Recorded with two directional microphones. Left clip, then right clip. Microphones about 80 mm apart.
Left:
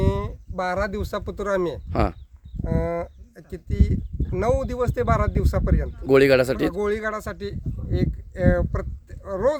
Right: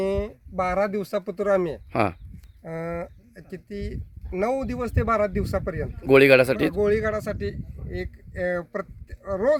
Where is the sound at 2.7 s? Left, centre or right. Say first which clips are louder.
Left 5 dB; centre.